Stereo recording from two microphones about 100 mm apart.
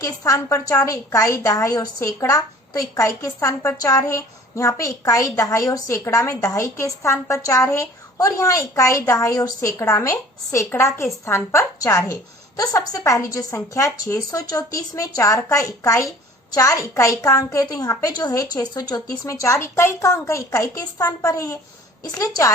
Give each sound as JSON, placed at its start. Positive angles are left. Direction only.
{"t": 0.0, "sound": "a woman's voice", "side_deg": 35}